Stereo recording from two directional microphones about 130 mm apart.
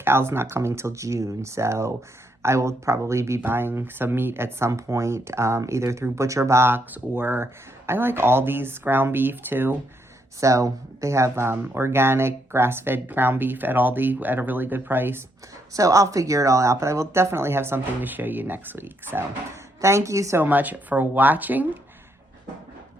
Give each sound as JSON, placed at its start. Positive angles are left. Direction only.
{"t": 0.0, "sound": "speech", "side_deg": -20}
{"t": 20.4, "sound": "speech", "side_deg": -15}